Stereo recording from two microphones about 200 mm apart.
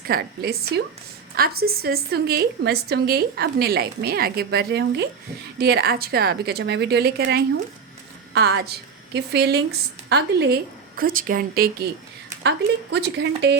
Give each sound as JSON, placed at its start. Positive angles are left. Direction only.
{"t": 0.0, "sound": "a woman's voice", "side_deg": -50}